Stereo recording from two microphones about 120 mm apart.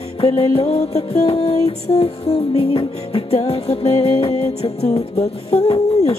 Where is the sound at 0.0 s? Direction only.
60° left (ahead or behind).